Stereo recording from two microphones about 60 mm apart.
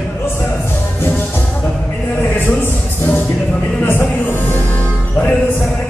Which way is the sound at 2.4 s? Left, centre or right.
Left.